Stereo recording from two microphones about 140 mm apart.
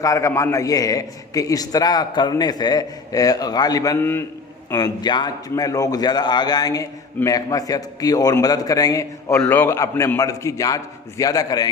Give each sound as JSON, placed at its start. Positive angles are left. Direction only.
{"t": 0.0, "sound": "a man's voice", "side_deg": 25}
{"t": 9.4, "sound": "a man's voice", "side_deg": 15}